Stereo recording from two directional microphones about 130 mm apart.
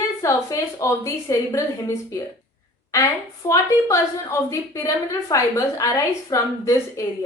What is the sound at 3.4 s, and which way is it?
A woman's voice, 25° left (ahead or behind).